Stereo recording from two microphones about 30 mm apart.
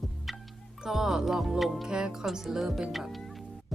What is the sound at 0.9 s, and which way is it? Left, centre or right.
Speech, centre.